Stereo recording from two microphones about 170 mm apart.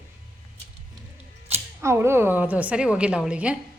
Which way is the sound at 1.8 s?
15° right (ahead or behind).